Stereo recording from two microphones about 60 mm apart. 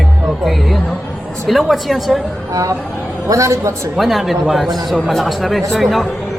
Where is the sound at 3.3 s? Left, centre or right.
Right.